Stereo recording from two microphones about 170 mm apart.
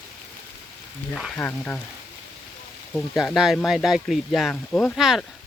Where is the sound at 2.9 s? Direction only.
Centre (ahead or behind).